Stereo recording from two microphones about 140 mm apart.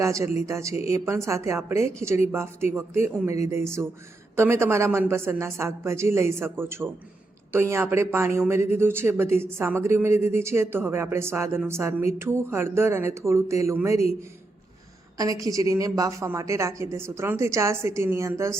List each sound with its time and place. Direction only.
0.0 s a woman's voice: 20° right (ahead or behind)
15.2 s a woman's voice: 25° right (ahead or behind)